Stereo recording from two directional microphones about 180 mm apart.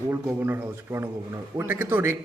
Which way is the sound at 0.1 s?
10° right (ahead or behind).